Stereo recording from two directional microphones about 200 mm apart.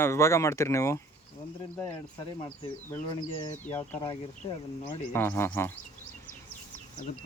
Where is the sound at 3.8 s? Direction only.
25° left (ahead or behind).